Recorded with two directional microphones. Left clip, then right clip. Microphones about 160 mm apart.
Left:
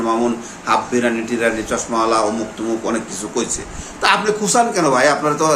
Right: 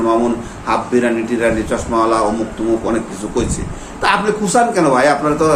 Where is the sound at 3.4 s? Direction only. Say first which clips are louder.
Right 2 dB; 15° left (ahead or behind).